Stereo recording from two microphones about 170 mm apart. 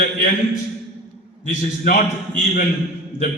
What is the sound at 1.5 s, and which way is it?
Speech, 50° left (ahead or behind).